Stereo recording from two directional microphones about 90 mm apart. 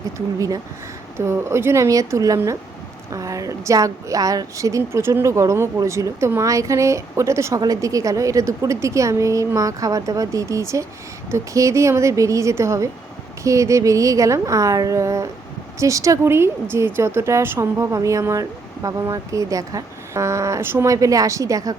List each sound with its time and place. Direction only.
0.3 s a woman's voice: 40° right (ahead or behind)
4.9 s a woman's voice: 30° right (ahead or behind)